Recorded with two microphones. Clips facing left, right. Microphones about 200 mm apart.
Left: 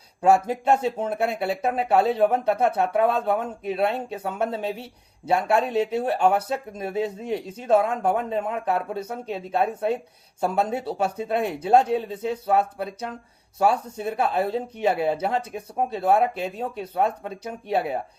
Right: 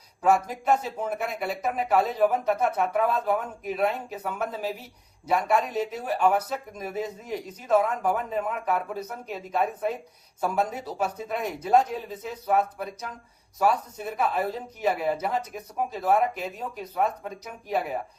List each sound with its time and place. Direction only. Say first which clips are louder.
0.3 s speech: left 3 dB; 30° left (ahead or behind)